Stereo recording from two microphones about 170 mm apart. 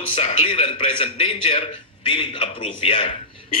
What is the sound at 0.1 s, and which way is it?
A man's voice, 35° left (ahead or behind).